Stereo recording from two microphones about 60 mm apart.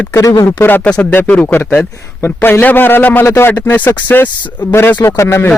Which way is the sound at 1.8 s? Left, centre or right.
Left.